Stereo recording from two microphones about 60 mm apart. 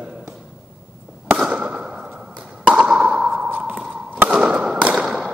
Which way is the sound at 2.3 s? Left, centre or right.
Right.